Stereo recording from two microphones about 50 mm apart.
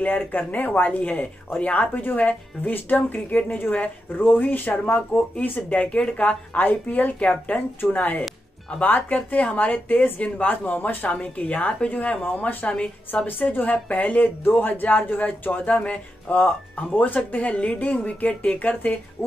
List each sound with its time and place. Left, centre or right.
0.0 s a woman's voice: left
4.2 s a woman's voice: left
5.9 s speech: left
6.2 s a woman's voice: left
12.2 s a woman's voice: left
15.6 s speech: left
16.3 s a woman's voice: left